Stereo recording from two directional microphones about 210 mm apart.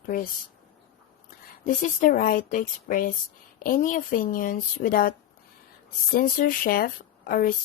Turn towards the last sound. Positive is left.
turn(degrees=40)  # may be behind; listen again after turning